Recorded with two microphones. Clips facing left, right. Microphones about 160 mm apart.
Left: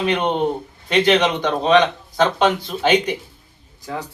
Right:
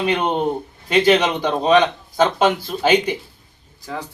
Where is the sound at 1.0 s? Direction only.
10° right (ahead or behind).